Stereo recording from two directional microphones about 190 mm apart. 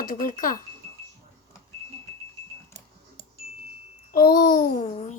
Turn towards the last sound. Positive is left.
turn(degrees=40)  # may be behind; listen again after turning